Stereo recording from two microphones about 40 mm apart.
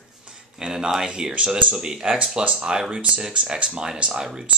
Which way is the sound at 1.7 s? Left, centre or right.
Centre.